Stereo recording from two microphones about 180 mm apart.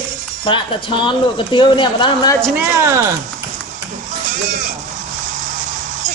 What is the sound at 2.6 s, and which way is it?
Speech, 15° right (ahead or behind).